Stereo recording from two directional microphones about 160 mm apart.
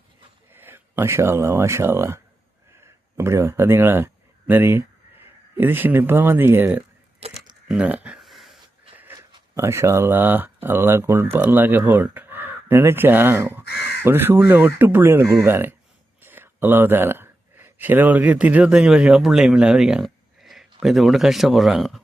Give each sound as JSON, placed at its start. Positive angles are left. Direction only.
{"t": 0.5, "sound": "speech", "side_deg": -15}
{"t": 7.2, "sound": "speech", "side_deg": -40}
{"t": 7.7, "sound": "a sound", "side_deg": -10}
{"t": 9.6, "sound": "speech", "side_deg": -15}